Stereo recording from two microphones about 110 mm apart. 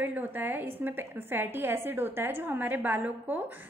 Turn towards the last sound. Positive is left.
turn(degrees=-15)  # may be behind; listen again after turning